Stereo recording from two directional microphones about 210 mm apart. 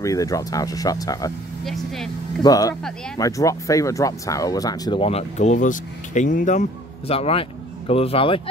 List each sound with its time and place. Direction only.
0.0 s speech: 15° left (ahead or behind)
1.6 s speech: centre (ahead or behind)
2.4 s speech: 15° left (ahead or behind)